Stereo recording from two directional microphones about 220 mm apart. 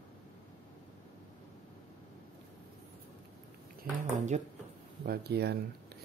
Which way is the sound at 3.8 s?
40° right (ahead or behind).